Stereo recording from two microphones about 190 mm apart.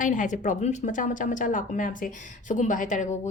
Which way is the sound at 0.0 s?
40° left (ahead or behind).